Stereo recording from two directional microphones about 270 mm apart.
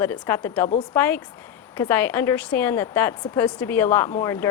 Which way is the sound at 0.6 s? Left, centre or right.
Left.